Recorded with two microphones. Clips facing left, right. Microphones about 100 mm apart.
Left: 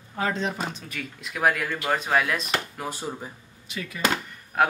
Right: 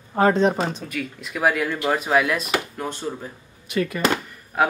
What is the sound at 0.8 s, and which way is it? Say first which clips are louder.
Speech: right 6 dB; centre (ahead or behind).